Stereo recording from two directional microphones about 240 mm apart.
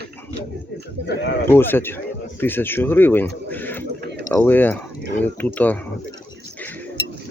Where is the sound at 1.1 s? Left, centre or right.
Left.